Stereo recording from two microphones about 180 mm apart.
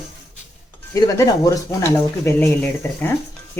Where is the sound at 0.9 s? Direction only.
20° left (ahead or behind).